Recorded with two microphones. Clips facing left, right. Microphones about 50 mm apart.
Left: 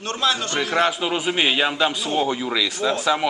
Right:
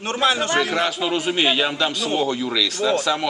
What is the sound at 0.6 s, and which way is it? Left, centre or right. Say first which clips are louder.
Speech: even; centre.